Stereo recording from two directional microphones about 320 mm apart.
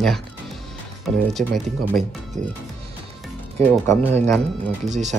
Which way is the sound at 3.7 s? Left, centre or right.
Centre.